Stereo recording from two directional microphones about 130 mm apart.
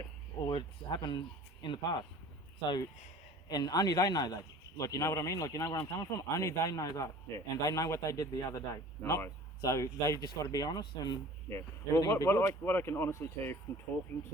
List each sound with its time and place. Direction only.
0.4 s a sound: 35° left (ahead or behind)
1.6 s speech: 35° left (ahead or behind)
3.5 s speech: 30° left (ahead or behind)